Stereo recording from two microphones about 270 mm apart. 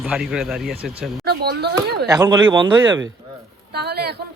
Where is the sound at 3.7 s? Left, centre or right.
Right.